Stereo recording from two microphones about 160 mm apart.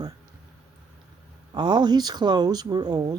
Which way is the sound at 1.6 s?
25° right (ahead or behind).